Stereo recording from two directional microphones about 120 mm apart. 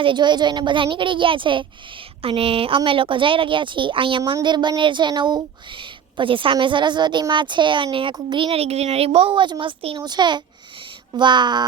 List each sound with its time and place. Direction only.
0.0 s speech: 40° right (ahead or behind)